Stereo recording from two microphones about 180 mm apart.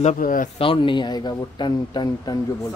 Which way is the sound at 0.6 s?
30° left (ahead or behind).